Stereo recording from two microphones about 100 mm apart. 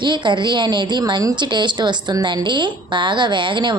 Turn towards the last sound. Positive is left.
turn(degrees=-55)  # may be behind; listen again after turning